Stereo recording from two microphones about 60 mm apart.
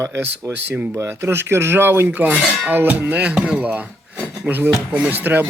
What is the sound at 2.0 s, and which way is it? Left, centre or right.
Music, right.